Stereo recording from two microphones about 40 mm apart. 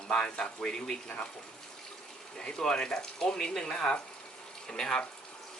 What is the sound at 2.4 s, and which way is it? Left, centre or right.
Speech, centre.